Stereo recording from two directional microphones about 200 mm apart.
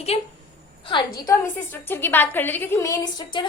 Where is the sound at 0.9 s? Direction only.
15° left (ahead or behind).